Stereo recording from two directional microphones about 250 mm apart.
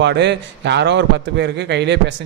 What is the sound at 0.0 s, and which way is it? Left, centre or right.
A man's voice, right.